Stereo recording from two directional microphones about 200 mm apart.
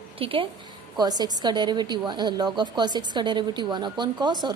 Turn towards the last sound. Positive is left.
turn(degrees=-20)  # may be behind; listen again after turning